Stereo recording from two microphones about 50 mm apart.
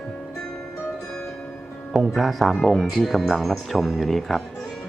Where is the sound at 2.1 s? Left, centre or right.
Centre.